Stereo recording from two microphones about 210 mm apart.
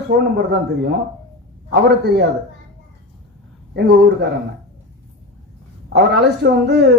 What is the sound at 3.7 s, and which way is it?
Speech, 50° right (ahead or behind).